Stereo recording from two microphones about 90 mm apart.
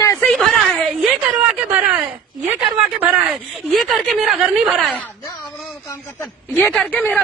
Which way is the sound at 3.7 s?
Centre (ahead or behind).